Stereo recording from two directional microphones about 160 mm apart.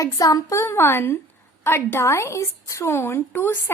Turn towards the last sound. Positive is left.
turn(degrees=15)  # may be behind; listen again after turning